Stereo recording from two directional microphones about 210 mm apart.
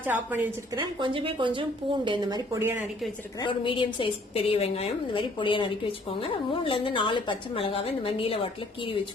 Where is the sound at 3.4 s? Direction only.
25° left (ahead or behind).